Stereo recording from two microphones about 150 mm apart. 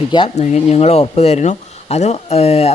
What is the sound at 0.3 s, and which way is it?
Speech, 50° left (ahead or behind).